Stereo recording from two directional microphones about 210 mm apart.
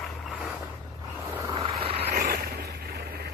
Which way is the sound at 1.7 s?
30° right (ahead or behind).